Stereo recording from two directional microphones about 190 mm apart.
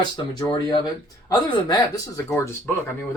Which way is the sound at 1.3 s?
20° left (ahead or behind).